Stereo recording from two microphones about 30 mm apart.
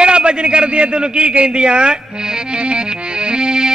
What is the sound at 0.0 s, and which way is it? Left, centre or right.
A man's voice, right.